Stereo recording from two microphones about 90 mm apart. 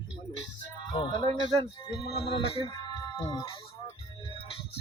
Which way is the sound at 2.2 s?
90° left.